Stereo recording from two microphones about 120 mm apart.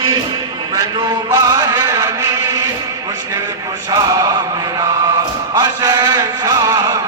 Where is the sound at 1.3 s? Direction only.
25° right (ahead or behind).